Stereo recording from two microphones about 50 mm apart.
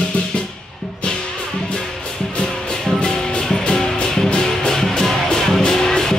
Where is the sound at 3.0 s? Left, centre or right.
Centre.